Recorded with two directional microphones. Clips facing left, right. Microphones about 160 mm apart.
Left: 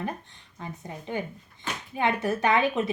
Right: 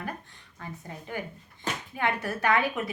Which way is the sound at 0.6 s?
20° left (ahead or behind).